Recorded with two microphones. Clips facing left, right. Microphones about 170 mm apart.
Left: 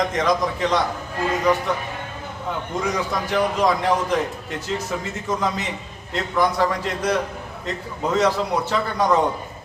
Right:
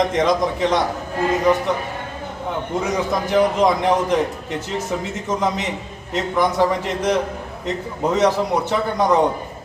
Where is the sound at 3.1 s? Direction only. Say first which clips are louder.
Right 7 dB; 20° right (ahead or behind).